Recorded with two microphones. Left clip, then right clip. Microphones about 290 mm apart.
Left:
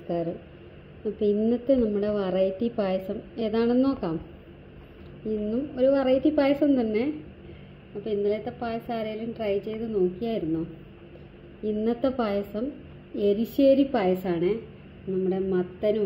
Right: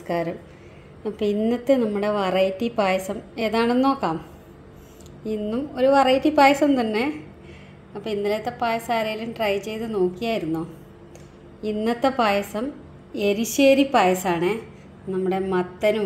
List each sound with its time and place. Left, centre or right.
1.4 s a woman's voice: centre
5.2 s a woman's voice: centre
11.6 s a woman's voice: centre